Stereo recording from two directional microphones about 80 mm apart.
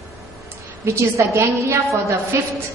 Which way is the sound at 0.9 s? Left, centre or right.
Right.